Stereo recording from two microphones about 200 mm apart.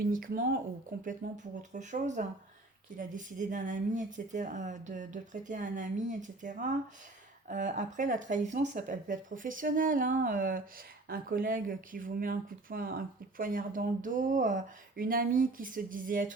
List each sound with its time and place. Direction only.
0.0 s a woman's voice: 45° right (ahead or behind)